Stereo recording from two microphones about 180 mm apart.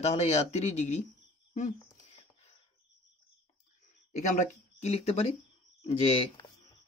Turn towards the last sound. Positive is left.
turn(degrees=30)  # may be behind; listen again after turning